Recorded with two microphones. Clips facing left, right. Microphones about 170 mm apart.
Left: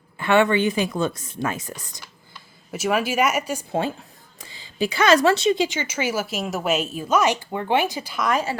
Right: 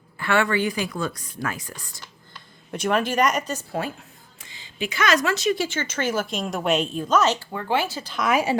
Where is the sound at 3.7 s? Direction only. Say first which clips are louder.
Left 7 dB; 30° left (ahead or behind); by 8.2 s 10° left (ahead or behind).